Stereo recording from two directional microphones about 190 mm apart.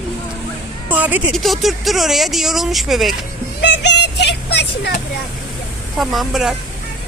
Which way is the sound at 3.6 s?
65° left (ahead or behind).